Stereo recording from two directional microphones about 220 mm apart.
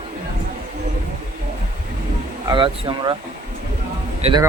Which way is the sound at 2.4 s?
20° right (ahead or behind).